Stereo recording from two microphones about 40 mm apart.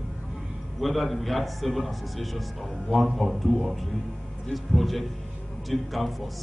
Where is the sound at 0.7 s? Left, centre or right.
Centre.